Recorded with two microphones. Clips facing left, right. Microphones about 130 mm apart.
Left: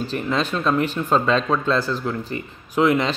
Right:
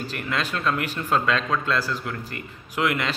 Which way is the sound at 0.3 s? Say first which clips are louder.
Left 4 dB; 20° left (ahead or behind).